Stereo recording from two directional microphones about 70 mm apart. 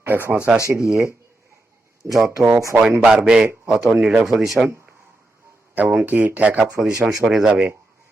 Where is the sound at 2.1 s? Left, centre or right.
Centre.